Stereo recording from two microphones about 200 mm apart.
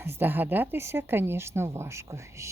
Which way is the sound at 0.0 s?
10° right (ahead or behind).